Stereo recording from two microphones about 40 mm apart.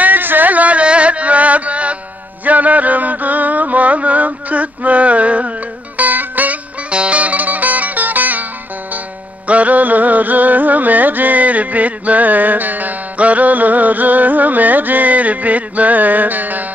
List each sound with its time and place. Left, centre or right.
0.0 s music: right
6.9 s music: right
9.5 s music: right